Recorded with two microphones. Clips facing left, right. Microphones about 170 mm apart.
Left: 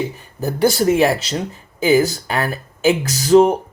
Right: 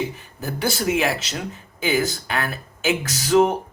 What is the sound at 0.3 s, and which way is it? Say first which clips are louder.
Speech: left 9 dB; 40° left (ahead or behind).